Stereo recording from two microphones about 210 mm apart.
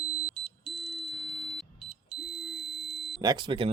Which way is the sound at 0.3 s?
Centre (ahead or behind).